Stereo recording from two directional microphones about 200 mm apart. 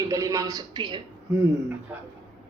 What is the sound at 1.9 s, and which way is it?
Speech, 5° right (ahead or behind).